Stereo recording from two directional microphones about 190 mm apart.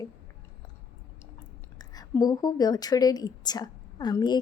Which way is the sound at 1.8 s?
20° left (ahead or behind).